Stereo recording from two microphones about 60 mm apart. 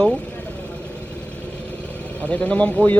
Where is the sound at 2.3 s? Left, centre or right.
Left.